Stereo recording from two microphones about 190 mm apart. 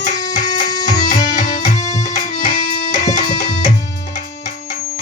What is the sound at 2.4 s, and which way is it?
Music, 40° left (ahead or behind).